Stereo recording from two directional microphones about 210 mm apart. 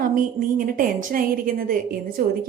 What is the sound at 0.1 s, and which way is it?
A woman's voice, 40° right (ahead or behind).